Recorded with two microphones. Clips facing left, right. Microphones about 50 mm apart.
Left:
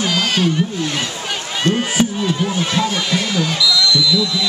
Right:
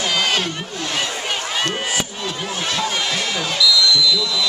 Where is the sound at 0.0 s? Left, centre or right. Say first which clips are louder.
Left 2 dB; centre.